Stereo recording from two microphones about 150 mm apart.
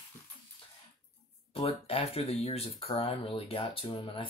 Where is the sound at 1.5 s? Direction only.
40° left (ahead or behind).